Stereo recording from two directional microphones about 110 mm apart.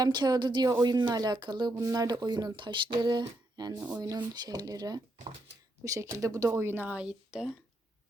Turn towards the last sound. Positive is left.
turn(degrees=-10)  # may be behind; listen again after turning